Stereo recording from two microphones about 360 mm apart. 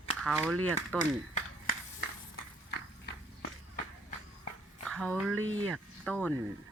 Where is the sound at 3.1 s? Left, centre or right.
Left.